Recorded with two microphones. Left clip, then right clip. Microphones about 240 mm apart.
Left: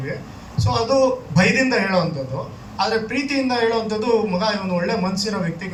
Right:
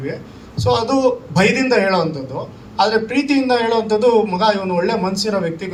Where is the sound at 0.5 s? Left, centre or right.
Right.